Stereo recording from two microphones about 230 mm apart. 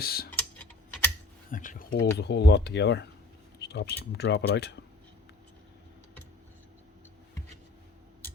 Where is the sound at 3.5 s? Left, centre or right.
Left.